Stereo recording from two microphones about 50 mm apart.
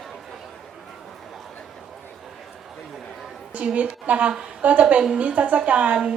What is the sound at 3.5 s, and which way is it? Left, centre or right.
A woman's voice, right.